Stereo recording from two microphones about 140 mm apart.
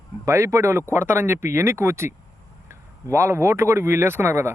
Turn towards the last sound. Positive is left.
turn(degrees=-20)  # may be behind; listen again after turning